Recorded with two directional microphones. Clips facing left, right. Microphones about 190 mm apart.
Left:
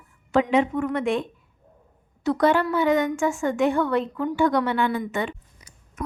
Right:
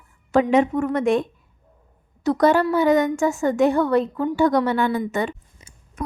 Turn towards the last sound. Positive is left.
turn(degrees=-30)  # may be behind; listen again after turning